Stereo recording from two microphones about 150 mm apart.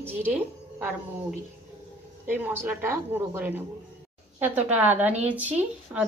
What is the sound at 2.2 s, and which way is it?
Speech, 15° right (ahead or behind).